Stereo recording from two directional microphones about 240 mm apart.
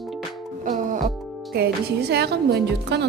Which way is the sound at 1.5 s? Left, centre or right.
Right.